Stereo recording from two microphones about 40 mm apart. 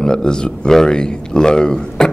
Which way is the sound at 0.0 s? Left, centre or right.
Centre.